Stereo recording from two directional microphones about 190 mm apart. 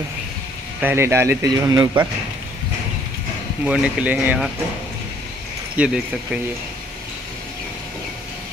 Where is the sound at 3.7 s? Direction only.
5° right (ahead or behind).